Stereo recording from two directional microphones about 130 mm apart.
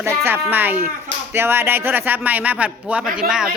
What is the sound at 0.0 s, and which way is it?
Speech, 20° right (ahead or behind).